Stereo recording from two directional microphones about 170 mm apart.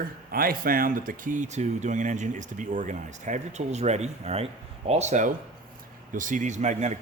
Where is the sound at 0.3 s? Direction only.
60° right (ahead or behind).